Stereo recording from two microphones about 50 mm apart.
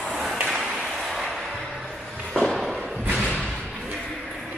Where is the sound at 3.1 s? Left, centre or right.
Left.